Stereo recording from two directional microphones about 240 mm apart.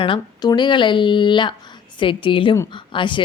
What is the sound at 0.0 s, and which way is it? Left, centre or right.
Speech, centre.